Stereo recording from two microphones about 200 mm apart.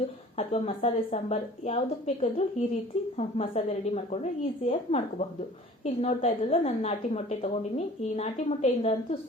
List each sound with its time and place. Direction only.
0.3 s a woman's voice: 30° left (ahead or behind)